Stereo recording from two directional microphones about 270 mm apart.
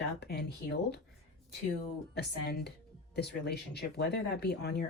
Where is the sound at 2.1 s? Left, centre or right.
Left.